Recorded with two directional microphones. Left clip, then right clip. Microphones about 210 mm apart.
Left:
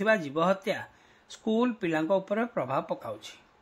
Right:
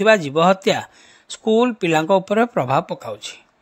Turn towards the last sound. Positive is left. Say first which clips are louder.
# right 7 dB
turn(degrees=-40)  # may be behind; listen again after turning